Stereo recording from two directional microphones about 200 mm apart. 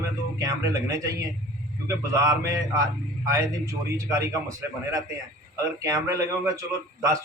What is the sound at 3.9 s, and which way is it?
A man's voice, 15° right (ahead or behind).